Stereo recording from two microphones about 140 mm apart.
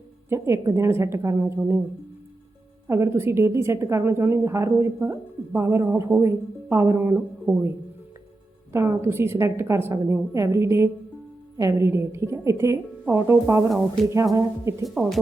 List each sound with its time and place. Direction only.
0.3 s a woman's voice: 20° right (ahead or behind)
2.8 s a woman's voice: 20° right (ahead or behind)
8.7 s a woman's voice: 20° right (ahead or behind)
13.7 s speech: centre (ahead or behind)
14.3 s a woman's voice: 20° right (ahead or behind)
14.8 s speech: centre (ahead or behind)